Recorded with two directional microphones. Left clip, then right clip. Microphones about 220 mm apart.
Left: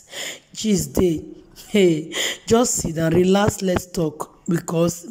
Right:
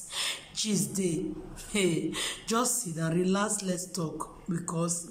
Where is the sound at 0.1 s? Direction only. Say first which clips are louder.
Left 2 dB; 30° left (ahead or behind).